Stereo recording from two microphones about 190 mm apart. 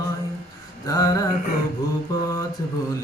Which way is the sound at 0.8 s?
20° left (ahead or behind).